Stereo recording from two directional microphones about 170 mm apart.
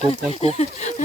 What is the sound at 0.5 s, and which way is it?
Speech, 40° left (ahead or behind).